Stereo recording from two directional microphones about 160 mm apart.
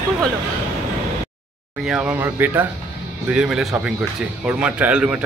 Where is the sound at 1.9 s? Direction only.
5° right (ahead or behind).